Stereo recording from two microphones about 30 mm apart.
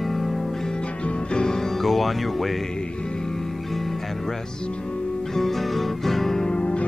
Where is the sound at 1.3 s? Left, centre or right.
Left.